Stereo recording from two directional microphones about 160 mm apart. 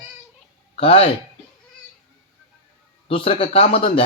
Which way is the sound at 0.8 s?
35° left (ahead or behind).